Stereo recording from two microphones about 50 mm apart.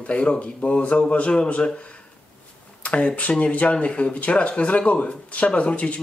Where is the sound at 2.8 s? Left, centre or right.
Left.